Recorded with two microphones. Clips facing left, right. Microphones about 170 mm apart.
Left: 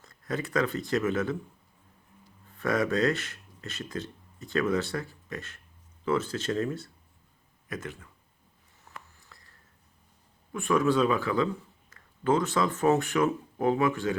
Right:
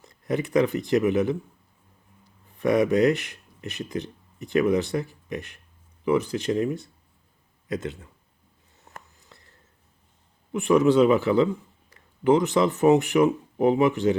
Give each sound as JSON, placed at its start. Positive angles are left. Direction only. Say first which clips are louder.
{"t": 0.0, "sound": "speech", "louder": "right 6 dB", "side_deg": -20}
{"t": 2.6, "sound": "a man's voice", "louder": "right 6 dB", "side_deg": -20}
{"t": 9.1, "sound": "a sound", "louder": "right 3 dB", "side_deg": -20}
{"t": 10.5, "sound": "a man's voice", "louder": "right 6 dB", "side_deg": -20}